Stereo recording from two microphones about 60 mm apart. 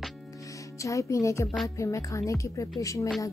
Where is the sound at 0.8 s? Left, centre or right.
Left.